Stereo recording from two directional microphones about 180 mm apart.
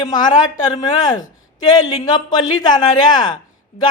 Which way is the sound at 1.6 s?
20° left (ahead or behind).